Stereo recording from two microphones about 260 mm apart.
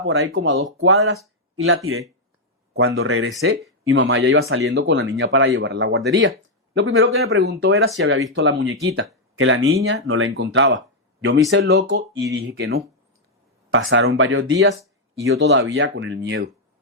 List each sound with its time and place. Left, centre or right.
0.0 s speech: right
7.3 s speech: right
11.9 s speech: centre
12.3 s speech: right